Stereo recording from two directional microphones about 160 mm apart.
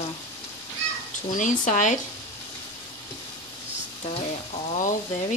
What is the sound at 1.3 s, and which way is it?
Speech, 55° left (ahead or behind).